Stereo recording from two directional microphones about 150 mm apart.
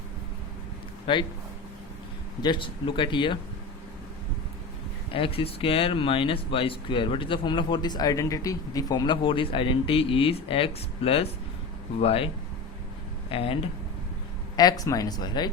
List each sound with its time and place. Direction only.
1.1 s speech: 35° left (ahead or behind)
2.4 s speech: 35° left (ahead or behind)
5.1 s speech: 35° left (ahead or behind)
13.3 s speech: 40° left (ahead or behind)
14.5 s speech: 25° left (ahead or behind)